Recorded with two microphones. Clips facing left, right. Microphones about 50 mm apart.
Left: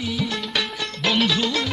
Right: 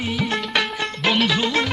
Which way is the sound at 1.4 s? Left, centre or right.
Right.